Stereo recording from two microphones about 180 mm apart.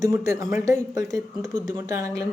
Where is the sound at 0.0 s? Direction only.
15° right (ahead or behind).